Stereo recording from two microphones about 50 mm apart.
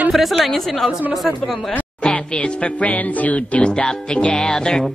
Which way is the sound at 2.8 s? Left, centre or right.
Left.